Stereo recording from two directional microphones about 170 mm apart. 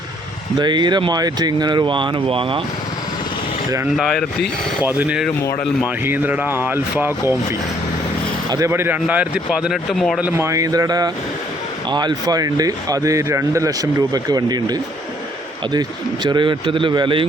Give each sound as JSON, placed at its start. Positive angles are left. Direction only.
{"t": 0.6, "sound": "speech", "side_deg": -25}
{"t": 3.9, "sound": "speech", "side_deg": 0}
{"t": 5.4, "sound": "speech", "side_deg": 15}
{"t": 6.1, "sound": "speech", "side_deg": -10}
{"t": 8.4, "sound": "speech", "side_deg": -20}
{"t": 10.2, "sound": "speech", "side_deg": -10}